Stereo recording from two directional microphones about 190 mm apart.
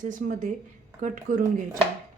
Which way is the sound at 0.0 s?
45° right (ahead or behind).